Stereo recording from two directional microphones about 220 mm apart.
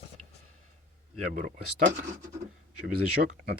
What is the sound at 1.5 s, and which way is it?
Speech, 40° right (ahead or behind).